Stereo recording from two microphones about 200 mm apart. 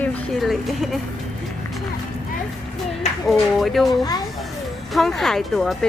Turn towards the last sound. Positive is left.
turn(degrees=0)  # may be behind; listen again after turning